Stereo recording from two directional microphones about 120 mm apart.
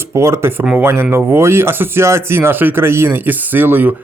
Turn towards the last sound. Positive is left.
turn(degrees=-15)  # may be behind; listen again after turning